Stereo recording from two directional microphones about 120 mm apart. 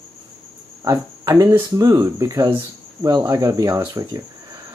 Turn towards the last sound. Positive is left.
turn(degrees=-30)  # may be behind; listen again after turning